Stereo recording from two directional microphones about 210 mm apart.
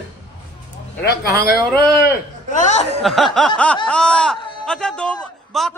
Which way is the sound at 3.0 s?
Centre (ahead or behind).